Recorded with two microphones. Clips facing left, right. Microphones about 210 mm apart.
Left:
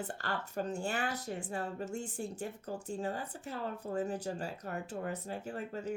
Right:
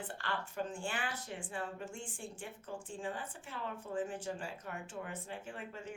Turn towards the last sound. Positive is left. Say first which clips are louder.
# left 6 dB
turn(degrees=40)  # may be behind; listen again after turning